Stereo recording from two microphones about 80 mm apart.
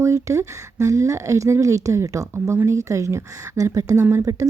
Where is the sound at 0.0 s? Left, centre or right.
Right.